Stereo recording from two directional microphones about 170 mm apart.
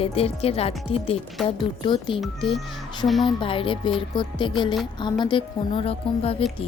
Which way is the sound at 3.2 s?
30° left (ahead or behind).